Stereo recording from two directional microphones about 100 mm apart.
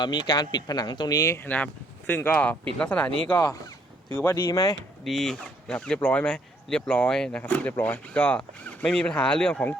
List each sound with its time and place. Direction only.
0.0 s speech: 45° left (ahead or behind)
1.5 s speech: 15° left (ahead or behind)
4.4 s speech: 40° left (ahead or behind)
5.0 s speech: 5° left (ahead or behind)